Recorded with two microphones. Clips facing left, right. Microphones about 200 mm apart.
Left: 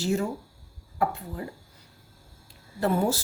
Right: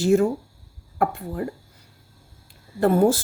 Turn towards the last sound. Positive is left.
turn(degrees=-50)  # may be behind; listen again after turning